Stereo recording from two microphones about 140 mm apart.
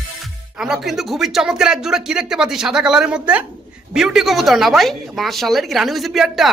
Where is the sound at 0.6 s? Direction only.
Centre (ahead or behind).